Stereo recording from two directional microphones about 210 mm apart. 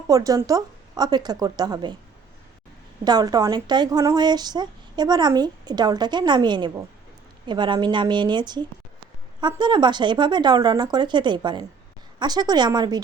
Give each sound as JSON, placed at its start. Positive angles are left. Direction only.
{"t": 0.1, "sound": "speech", "side_deg": -15}
{"t": 3.0, "sound": "speech", "side_deg": -20}